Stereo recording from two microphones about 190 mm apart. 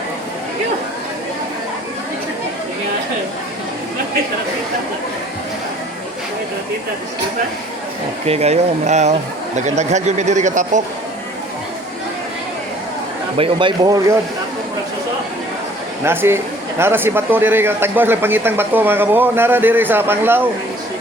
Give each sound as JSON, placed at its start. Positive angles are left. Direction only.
{"t": 8.3, "sound": "speech", "side_deg": -35}
{"t": 13.3, "sound": "speech", "side_deg": -30}
{"t": 16.0, "sound": "a man's voice", "side_deg": -15}